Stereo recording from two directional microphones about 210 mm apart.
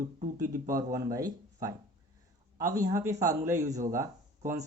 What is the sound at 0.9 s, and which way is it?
Speech, 15° right (ahead or behind).